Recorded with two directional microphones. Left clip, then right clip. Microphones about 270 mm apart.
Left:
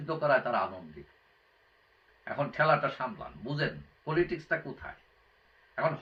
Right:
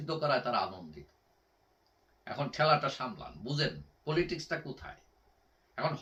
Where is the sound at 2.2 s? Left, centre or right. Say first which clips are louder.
Left 2 dB; centre.